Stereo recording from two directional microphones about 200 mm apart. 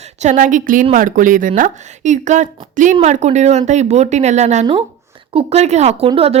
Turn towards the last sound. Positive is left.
turn(degrees=-30)  # may be behind; listen again after turning